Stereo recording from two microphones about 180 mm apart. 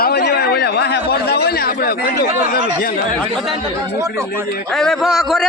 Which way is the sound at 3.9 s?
15° right (ahead or behind).